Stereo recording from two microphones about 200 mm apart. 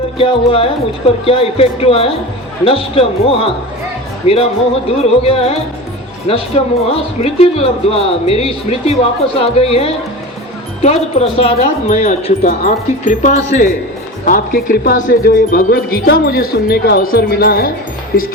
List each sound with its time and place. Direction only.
0.2 s speech: 25° left (ahead or behind); by 18.3 s 50° left (ahead or behind)